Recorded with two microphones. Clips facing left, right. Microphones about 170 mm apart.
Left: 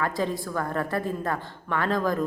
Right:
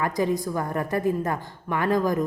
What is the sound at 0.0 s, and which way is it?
A woman's voice, 15° right (ahead or behind).